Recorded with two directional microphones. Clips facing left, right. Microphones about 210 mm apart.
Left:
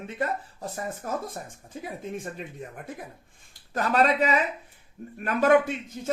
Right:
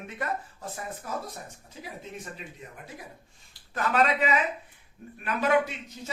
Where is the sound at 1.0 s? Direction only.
50° left (ahead or behind).